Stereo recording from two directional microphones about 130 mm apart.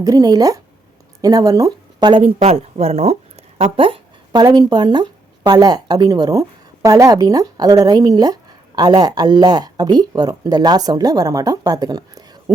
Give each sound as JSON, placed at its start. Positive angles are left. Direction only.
{"t": 0.0, "sound": "speech", "side_deg": -30}
{"t": 2.2, "sound": "speech", "side_deg": -55}
{"t": 3.6, "sound": "speech", "side_deg": -45}